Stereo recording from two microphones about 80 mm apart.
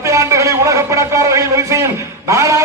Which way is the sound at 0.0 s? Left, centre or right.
Right.